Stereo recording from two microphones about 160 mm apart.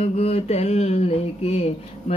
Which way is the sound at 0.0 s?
40° left (ahead or behind).